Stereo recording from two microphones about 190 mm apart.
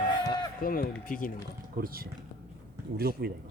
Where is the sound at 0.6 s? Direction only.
50° left (ahead or behind).